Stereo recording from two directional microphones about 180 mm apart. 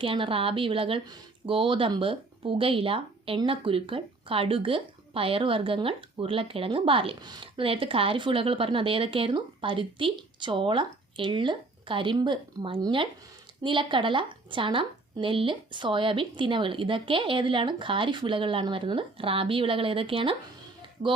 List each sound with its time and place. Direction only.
0.0 s speech: 30° right (ahead or behind)